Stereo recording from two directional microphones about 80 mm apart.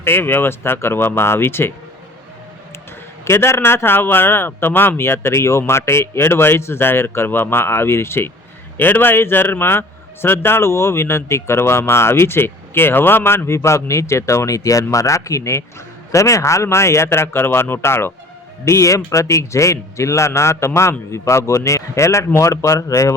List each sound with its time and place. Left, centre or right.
0.0 s speech: left
3.2 s a man's voice: left